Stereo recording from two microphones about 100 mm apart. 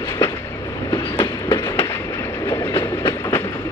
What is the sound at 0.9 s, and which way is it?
Train, 45° left (ahead or behind).